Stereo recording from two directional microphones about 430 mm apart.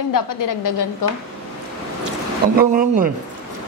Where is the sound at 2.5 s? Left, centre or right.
Centre.